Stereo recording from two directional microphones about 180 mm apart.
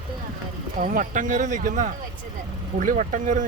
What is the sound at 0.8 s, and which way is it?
Speech, 50° right (ahead or behind).